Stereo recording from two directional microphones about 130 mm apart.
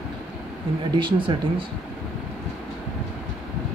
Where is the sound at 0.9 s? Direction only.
40° right (ahead or behind).